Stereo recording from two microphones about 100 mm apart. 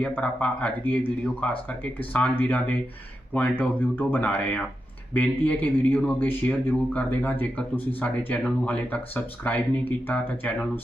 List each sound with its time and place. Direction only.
0.0 s speech: 15° left (ahead or behind)